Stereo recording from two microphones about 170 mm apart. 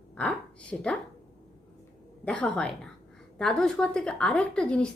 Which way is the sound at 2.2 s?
5° left (ahead or behind).